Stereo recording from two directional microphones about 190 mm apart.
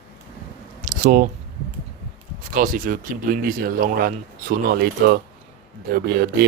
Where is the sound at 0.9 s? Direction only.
45° right (ahead or behind).